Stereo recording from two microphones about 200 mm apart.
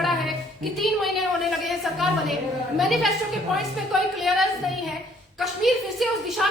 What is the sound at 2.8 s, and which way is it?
Speech, centre (ahead or behind).